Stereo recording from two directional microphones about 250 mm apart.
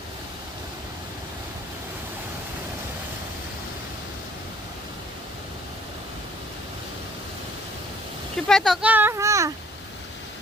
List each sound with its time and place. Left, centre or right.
8.4 s a child's voice: centre